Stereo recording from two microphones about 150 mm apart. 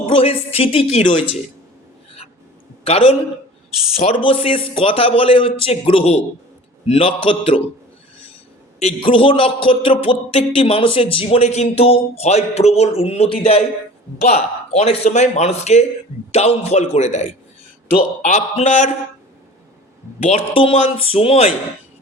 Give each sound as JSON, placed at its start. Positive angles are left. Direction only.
{"t": 0.1, "sound": "a woman's voice", "side_deg": 40}
{"t": 2.8, "sound": "a man's voice", "side_deg": 40}
{"t": 8.8, "sound": "a man's voice", "side_deg": 35}
{"t": 20.2, "sound": "a man's voice", "side_deg": 40}